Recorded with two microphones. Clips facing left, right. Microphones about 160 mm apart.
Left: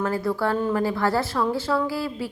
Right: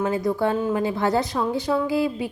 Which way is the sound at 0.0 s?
20° right (ahead or behind).